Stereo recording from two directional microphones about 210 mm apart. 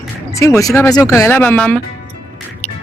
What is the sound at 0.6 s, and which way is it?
Speech, 15° left (ahead or behind).